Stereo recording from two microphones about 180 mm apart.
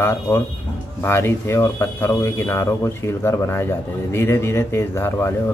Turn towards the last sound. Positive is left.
turn(degrees=15)  # may be behind; listen again after turning